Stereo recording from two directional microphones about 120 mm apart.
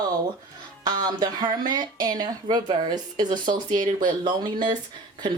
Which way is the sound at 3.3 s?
90° right.